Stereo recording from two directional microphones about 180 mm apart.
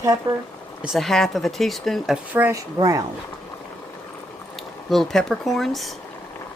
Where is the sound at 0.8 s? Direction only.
Centre (ahead or behind).